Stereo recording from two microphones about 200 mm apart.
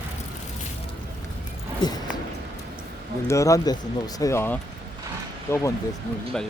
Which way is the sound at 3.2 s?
15° left (ahead or behind).